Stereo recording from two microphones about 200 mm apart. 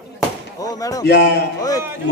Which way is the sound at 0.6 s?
15° left (ahead or behind).